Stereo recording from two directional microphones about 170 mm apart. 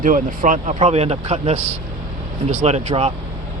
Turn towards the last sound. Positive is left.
turn(degrees=-40)  # may be behind; listen again after turning